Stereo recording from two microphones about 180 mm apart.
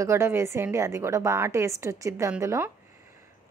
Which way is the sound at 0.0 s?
15° right (ahead or behind).